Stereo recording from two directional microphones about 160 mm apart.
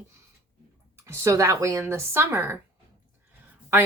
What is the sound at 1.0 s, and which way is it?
Speech, 15° right (ahead or behind).